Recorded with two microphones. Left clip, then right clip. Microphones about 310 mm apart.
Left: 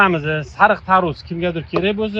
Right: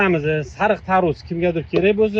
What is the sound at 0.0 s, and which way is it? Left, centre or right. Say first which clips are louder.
Speech: left 3 dB; left.